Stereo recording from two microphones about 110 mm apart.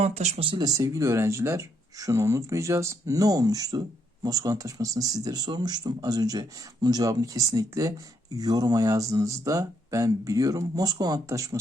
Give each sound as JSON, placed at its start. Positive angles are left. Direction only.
{"t": 0.0, "sound": "speech", "side_deg": -85}
{"t": 0.6, "sound": "speech", "side_deg": -30}